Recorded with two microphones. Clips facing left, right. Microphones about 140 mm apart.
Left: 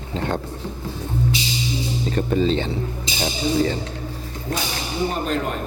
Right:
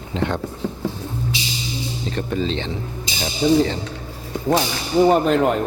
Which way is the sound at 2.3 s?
40° left (ahead or behind).